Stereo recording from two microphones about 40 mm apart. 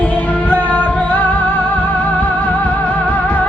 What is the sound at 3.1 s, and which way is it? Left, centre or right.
Music, left.